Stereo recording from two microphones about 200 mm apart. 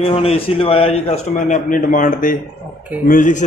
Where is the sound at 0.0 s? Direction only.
30° left (ahead or behind).